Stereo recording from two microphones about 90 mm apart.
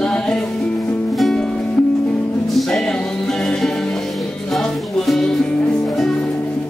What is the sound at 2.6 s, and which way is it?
Music, 5° left (ahead or behind).